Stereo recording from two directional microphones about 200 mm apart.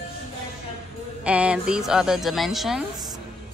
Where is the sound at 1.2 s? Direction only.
5° right (ahead or behind).